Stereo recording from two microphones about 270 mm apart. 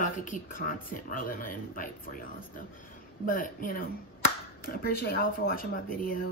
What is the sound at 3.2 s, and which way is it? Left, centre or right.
Speech, left.